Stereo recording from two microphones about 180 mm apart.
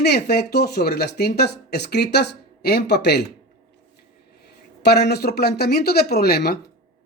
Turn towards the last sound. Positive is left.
turn(degrees=60)  # may be behind; listen again after turning